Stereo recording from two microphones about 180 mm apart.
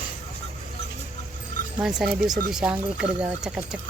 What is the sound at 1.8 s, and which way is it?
Speech, centre (ahead or behind).